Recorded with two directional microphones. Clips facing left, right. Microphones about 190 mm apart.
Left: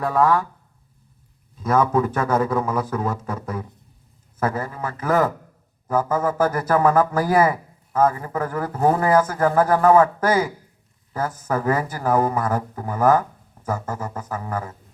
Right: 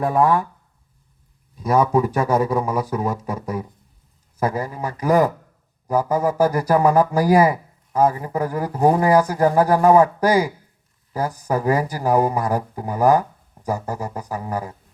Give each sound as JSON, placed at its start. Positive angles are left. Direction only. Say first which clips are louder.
{"t": 0.0, "sound": "speech", "louder": "right 1 dB", "side_deg": -15}
{"t": 1.5, "sound": "speech", "louder": "right 1 dB", "side_deg": -15}